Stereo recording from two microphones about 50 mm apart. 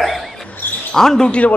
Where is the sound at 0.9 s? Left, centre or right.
Centre.